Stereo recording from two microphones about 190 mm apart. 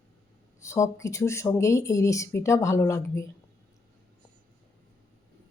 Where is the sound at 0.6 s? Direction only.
15° left (ahead or behind).